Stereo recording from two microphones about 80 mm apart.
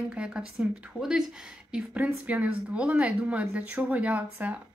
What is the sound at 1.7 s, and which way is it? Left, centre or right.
Speech, centre.